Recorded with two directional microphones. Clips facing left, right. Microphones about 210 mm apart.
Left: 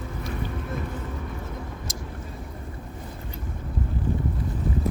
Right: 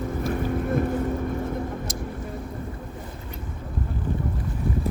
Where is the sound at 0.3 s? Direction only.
50° right (ahead or behind).